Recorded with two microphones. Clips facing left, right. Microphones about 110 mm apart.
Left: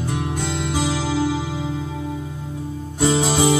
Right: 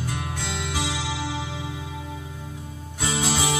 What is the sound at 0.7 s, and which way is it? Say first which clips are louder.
Music: left 8 dB; 40° left (ahead or behind).